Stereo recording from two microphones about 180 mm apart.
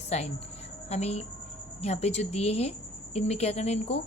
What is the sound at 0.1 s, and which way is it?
A woman's voice, 35° left (ahead or behind).